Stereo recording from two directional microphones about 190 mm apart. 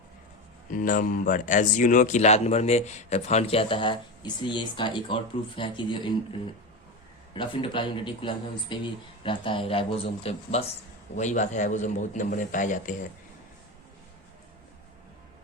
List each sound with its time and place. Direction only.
0.7 s speech: 45° left (ahead or behind); by 6.0 s 25° left (ahead or behind)
7.3 s speech: 25° left (ahead or behind); by 13.0 s 40° left (ahead or behind)